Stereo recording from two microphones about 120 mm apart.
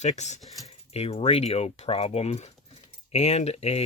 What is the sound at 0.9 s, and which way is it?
Speech, 60° left (ahead or behind).